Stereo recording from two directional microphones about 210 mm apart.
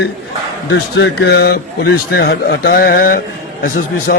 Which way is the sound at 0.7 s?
55° left (ahead or behind).